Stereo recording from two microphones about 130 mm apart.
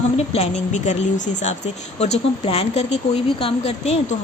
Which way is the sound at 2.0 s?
55° left (ahead or behind).